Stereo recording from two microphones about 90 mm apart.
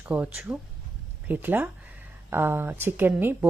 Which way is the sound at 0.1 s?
15° right (ahead or behind).